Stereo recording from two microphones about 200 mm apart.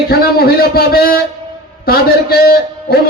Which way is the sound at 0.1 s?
50° left (ahead or behind).